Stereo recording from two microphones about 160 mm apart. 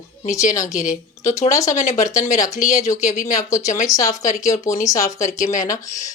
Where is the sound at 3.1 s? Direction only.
50° left (ahead or behind).